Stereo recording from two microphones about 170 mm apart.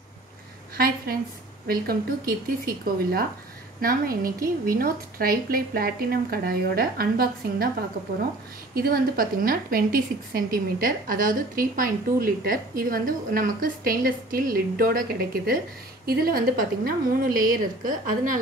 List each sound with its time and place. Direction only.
0.7 s a woman's voice: 60° right (ahead or behind)
8.7 s a woman's voice: 60° right (ahead or behind)